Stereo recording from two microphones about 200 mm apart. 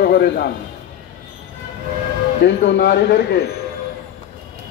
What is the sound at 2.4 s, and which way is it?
Speech, 55° left (ahead or behind).